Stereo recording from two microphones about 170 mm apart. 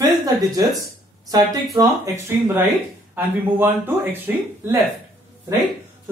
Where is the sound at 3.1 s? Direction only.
10° right (ahead or behind).